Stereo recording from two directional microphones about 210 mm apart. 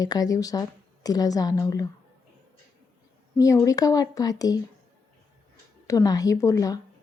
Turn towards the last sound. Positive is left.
turn(degrees=15)  # may be behind; listen again after turning